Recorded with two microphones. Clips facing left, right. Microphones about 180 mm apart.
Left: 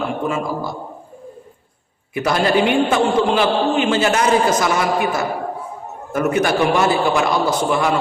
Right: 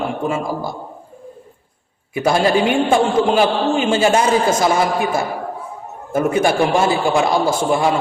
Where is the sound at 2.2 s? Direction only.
25° right (ahead or behind).